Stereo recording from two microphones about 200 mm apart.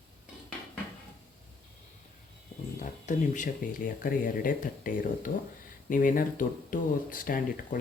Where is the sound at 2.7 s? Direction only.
40° left (ahead or behind).